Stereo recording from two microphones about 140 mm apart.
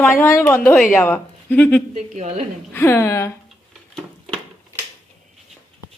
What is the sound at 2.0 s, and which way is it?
Speech, 60° right (ahead or behind).